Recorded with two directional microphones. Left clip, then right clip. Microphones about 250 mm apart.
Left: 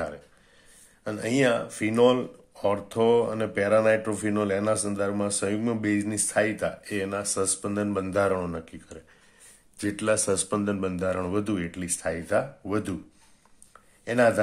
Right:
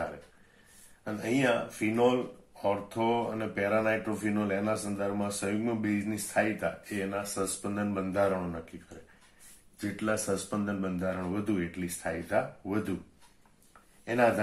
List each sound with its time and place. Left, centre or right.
1.0 s speech: left
9.8 s speech: left